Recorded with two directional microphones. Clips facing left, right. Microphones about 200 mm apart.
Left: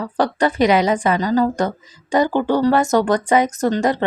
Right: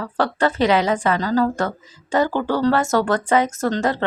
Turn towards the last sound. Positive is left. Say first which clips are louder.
# left 3 dB
turn(degrees=15)  # may be behind; listen again after turning